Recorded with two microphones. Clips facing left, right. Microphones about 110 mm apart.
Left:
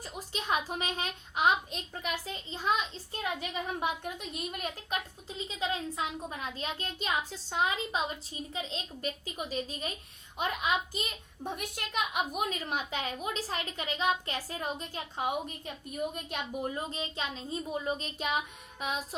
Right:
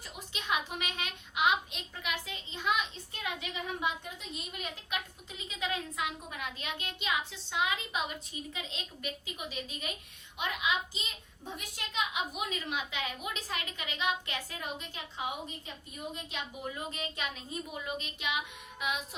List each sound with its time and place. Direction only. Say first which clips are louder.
0.0 s a child's voice: left 5 dB; 40° left (ahead or behind)
5.5 s a woman's voice: left 2 dB; 30° left (ahead or behind); by 16.7 s 50° left (ahead or behind)
16.7 s a woman's voice: left 3 dB; 30° left (ahead or behind)